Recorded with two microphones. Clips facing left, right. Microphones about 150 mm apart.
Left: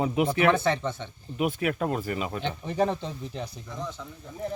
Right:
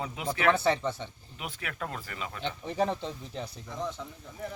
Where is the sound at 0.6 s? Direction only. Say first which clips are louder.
Left 1 dB; 5° right (ahead or behind).